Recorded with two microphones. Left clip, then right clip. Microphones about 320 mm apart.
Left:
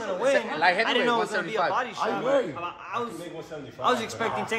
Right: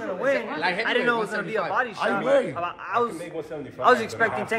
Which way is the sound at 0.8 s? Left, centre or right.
Centre.